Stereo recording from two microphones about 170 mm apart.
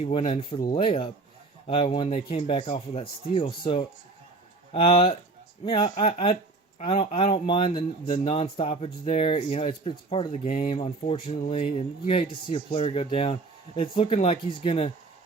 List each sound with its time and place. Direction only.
0.0 s speech: 35° left (ahead or behind)